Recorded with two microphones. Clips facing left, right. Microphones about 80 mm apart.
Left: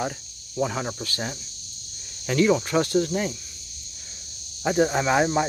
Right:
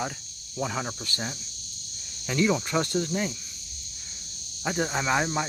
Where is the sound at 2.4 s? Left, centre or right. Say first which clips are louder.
Left 4 dB; centre.